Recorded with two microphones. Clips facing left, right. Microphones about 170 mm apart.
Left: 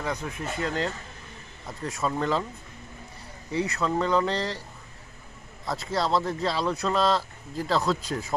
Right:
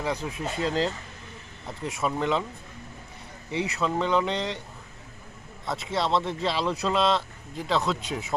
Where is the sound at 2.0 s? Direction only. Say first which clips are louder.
Even; 10° right (ahead or behind).